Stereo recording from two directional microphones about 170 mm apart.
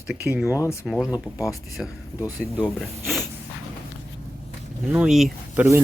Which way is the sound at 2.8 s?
Centre (ahead or behind).